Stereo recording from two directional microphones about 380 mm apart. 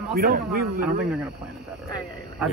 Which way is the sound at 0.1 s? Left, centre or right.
Right.